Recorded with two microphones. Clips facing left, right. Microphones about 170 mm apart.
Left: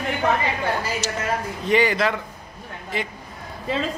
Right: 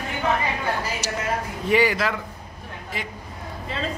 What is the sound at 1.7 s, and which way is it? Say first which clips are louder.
Speech: left 1 dB; 5° right (ahead or behind).